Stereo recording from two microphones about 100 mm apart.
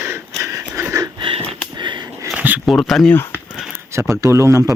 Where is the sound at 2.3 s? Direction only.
15° right (ahead or behind).